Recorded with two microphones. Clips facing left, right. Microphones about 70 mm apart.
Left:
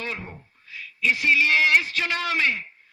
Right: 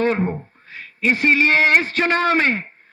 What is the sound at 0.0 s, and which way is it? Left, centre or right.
A man's voice, right.